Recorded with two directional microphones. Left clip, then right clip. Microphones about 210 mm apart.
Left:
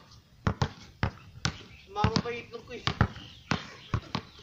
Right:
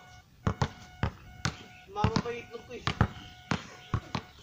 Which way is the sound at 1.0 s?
5° right (ahead or behind).